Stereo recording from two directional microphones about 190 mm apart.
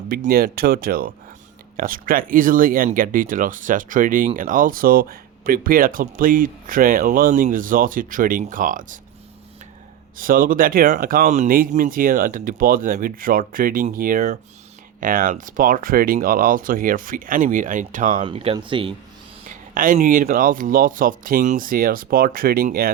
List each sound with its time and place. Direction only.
0.1 s speech: 50° right (ahead or behind)
10.2 s speech: 45° right (ahead or behind)
18.2 s speech: 30° right (ahead or behind)
19.5 s speech: 45° right (ahead or behind)